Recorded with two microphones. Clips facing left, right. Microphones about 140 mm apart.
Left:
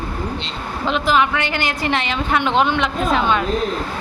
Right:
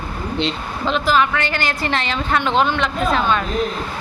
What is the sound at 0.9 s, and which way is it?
A woman's voice, 15° left (ahead or behind).